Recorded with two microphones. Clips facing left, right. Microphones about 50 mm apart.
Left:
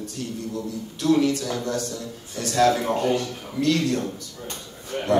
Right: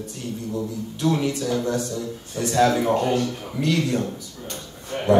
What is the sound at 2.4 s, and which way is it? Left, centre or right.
Speech, centre.